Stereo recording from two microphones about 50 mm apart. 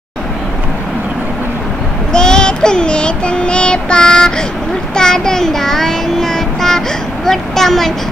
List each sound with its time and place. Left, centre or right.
2.1 s child singing: centre
4.9 s a sound: centre
7.2 s a woman's voice: centre